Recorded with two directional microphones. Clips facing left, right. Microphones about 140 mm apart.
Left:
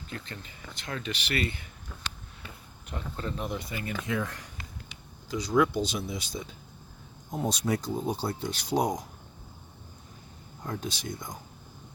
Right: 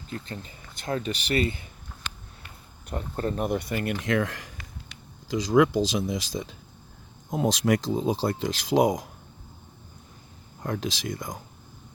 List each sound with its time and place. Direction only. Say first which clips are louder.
0.1 s speech: right 6 dB; 35° right (ahead or behind)
2.9 s speech: right 6 dB; 45° right (ahead or behind); by 9.0 s 90° right
10.6 s speech: right 5 dB; 90° right